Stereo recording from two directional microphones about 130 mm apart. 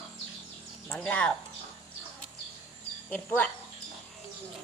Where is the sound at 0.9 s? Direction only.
10° left (ahead or behind).